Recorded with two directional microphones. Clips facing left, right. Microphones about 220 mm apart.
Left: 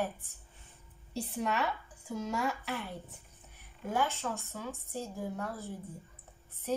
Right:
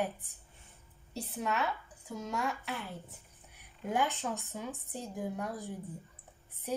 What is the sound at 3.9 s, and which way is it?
A woman's voice, 15° right (ahead or behind).